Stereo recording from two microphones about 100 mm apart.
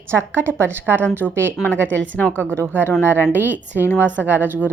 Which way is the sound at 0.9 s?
15° left (ahead or behind).